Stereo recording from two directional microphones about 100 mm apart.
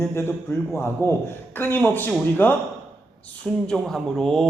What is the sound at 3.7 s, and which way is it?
Speech, 5° left (ahead or behind).